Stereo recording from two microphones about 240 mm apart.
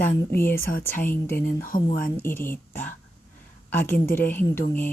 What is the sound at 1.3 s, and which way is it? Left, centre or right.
Speech, left.